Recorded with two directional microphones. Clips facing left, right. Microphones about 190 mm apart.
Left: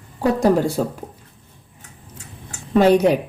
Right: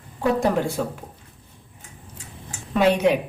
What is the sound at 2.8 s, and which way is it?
Speech, 40° left (ahead or behind).